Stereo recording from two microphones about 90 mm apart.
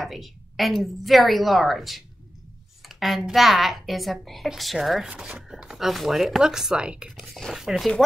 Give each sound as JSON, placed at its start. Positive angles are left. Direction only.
{"t": 0.0, "sound": "speech", "side_deg": 0}
{"t": 7.1, "sound": "speech", "side_deg": 0}